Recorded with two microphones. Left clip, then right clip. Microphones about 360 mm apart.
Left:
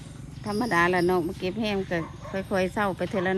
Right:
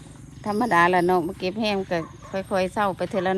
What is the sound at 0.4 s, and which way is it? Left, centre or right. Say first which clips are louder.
Speech: right 4 dB; centre.